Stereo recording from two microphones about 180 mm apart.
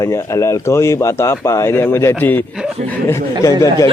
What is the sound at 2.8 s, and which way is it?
Speech, 15° left (ahead or behind).